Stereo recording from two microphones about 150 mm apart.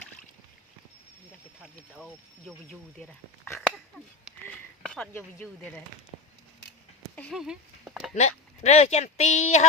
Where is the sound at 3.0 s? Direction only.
10° left (ahead or behind).